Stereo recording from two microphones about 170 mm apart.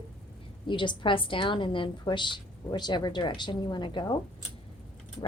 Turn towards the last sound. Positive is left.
turn(degrees=25)  # may be behind; listen again after turning